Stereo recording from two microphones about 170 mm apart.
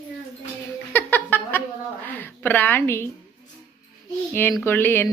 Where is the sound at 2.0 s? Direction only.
10° left (ahead or behind).